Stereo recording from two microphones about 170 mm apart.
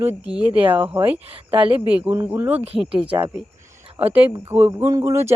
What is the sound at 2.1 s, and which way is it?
Speech, 10° right (ahead or behind).